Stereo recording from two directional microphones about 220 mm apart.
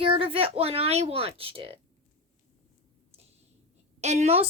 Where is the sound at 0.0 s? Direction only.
25° right (ahead or behind).